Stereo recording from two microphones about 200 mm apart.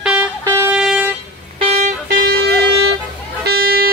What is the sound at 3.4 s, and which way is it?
Music, 50° right (ahead or behind).